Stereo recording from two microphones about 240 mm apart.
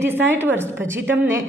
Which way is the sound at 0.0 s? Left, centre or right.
Centre.